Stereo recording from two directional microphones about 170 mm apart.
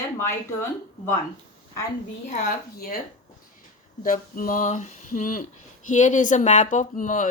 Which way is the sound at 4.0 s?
55° left (ahead or behind).